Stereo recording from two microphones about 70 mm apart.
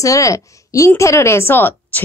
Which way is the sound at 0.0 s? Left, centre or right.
Left.